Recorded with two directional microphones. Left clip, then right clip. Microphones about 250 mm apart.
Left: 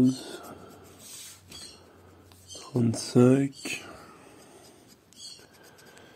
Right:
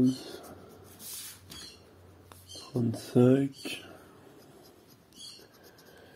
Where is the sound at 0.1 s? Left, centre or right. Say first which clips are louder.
Left 2 dB; centre.